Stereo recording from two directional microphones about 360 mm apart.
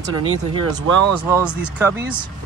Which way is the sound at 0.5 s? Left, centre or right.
Centre.